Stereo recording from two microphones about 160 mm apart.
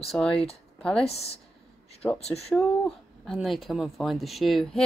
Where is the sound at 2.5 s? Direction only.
5° left (ahead or behind).